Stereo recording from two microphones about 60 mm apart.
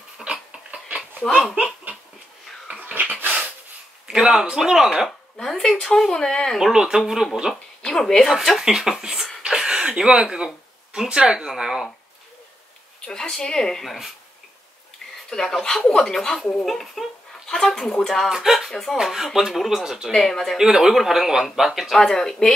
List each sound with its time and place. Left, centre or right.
0.2 s dog: centre
1.2 s speech: centre
2.7 s a sound: right
4.1 s a man's voice: centre
5.4 s speech: centre
6.6 s a man's voice: centre
7.8 s a woman's voice: centre
13.0 s speech: centre
15.2 s a man's voice: centre
18.7 s speech: centre
20.1 s speech: centre
20.5 s a man's voice: centre